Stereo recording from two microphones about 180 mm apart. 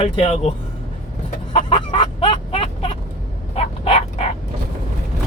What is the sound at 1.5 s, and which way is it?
Fowl, 25° left (ahead or behind).